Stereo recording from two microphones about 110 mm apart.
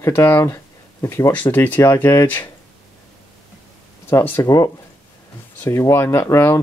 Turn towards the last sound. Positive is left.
turn(degrees=25)  # may be behind; listen again after turning